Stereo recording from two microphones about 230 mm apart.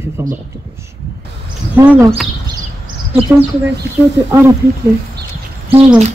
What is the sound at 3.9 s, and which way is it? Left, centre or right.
Speech, right.